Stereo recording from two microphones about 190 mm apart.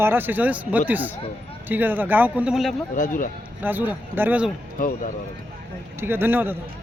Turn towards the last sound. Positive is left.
turn(degrees=-10)  # may be behind; listen again after turning